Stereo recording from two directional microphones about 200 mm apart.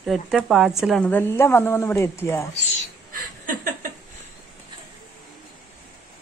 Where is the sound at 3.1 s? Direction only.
45° right (ahead or behind).